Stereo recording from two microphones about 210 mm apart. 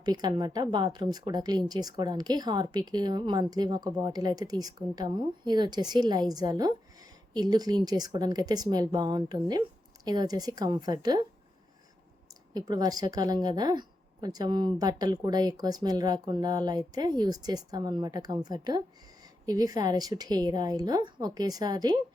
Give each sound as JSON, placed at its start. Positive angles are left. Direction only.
{"t": 0.0, "sound": "a woman's voice", "side_deg": -20}
{"t": 12.3, "sound": "a woman's voice", "side_deg": -20}